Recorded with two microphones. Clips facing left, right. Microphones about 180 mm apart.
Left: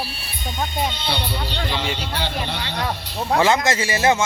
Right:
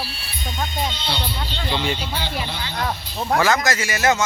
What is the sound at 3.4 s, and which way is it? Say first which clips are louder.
Speech: left 2 dB; 25° left (ahead or behind).